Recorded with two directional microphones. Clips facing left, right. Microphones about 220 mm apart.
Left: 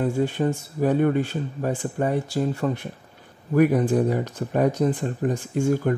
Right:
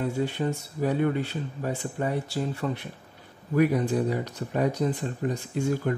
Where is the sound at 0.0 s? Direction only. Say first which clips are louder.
Left 5 dB; 50° left (ahead or behind).